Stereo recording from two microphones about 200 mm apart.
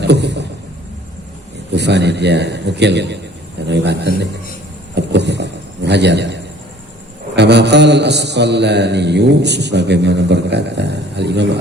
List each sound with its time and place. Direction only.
0.0 s vehicle: 60° right (ahead or behind)
1.7 s mantra: 60° right (ahead or behind)
4.9 s a sound: 60° right (ahead or behind)
7.3 s mantra: 60° right (ahead or behind)